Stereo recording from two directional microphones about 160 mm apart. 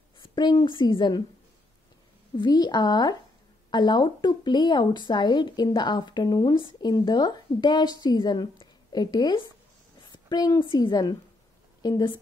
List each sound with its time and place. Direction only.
0.2 s a woman's voice: 30° left (ahead or behind)
2.3 s a woman's voice: 25° left (ahead or behind)